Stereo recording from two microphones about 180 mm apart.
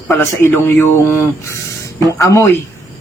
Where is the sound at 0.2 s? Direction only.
15° left (ahead or behind).